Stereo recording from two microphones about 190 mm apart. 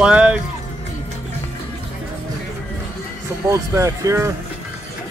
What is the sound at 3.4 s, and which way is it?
Speech, 15° right (ahead or behind).